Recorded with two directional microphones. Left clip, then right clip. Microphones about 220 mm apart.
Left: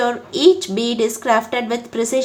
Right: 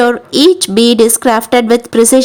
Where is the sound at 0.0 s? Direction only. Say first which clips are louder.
Right 6 dB; 45° right (ahead or behind).